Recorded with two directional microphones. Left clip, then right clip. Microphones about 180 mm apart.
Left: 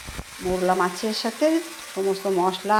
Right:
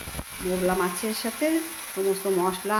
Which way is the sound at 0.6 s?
5° left (ahead or behind).